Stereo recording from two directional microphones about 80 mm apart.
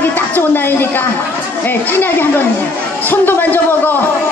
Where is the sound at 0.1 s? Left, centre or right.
Left.